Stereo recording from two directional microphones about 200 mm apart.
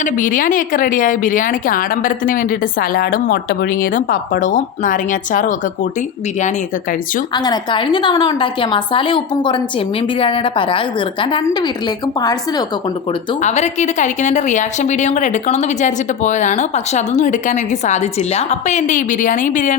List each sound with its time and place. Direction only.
0.0 s a woman's voice: 40° left (ahead or behind)
7.3 s a woman's voice: 20° left (ahead or behind)
13.4 s a woman's voice: 35° left (ahead or behind)